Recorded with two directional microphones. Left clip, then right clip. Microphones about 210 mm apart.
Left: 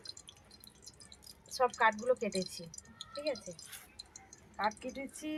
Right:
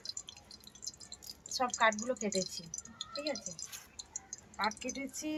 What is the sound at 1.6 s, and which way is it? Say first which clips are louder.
Speech: left 1 dB; 25° left (ahead or behind).